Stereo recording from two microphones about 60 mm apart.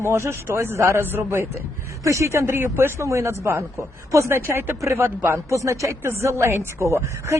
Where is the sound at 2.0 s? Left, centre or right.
Right.